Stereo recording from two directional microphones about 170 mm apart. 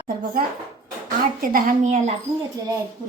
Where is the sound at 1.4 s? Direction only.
55° right (ahead or behind).